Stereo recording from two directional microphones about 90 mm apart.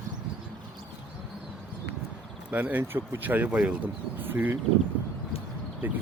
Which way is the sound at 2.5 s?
20° right (ahead or behind).